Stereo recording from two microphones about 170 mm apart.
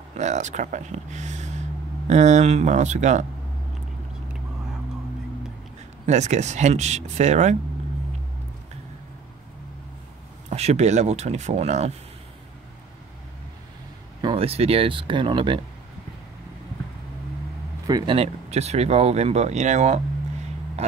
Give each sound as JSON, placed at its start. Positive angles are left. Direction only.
{"t": 0.2, "sound": "speech", "side_deg": -45}
{"t": 6.0, "sound": "speech", "side_deg": -45}
{"t": 10.5, "sound": "speech", "side_deg": -40}
{"t": 14.2, "sound": "speech", "side_deg": -35}
{"t": 17.8, "sound": "speech", "side_deg": -25}
{"t": 18.1, "sound": "speech", "side_deg": -35}